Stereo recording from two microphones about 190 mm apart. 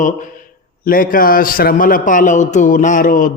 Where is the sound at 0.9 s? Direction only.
50° left (ahead or behind).